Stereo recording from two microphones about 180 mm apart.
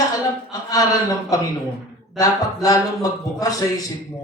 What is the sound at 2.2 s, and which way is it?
A man's voice, 20° left (ahead or behind).